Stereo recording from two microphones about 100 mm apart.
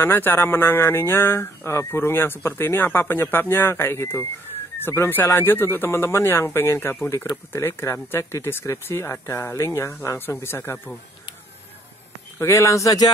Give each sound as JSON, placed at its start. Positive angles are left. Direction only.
{"t": 0.0, "sound": "speech", "side_deg": 20}
{"t": 12.4, "sound": "a man's voice", "side_deg": 30}